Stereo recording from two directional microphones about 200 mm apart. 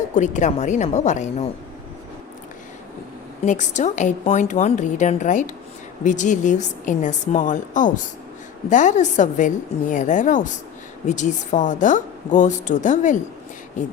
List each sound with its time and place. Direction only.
0.1 s a woman's voice: 35° left (ahead or behind)
3.4 s a woman's voice: 35° left (ahead or behind)